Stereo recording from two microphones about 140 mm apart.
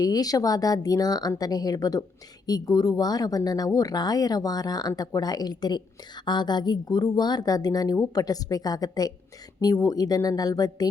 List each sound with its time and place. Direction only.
0.0 s speech: 25° left (ahead or behind)